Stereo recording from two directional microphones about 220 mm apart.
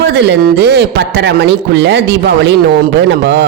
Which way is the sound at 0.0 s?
50° right (ahead or behind).